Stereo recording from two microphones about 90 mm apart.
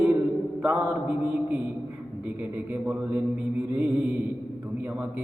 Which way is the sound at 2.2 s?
20° right (ahead or behind).